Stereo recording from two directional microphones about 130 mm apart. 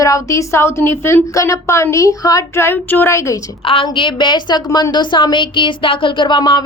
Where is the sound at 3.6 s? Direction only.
45° left (ahead or behind).